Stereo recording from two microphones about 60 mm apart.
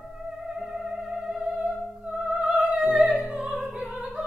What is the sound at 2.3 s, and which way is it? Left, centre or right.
Music, centre.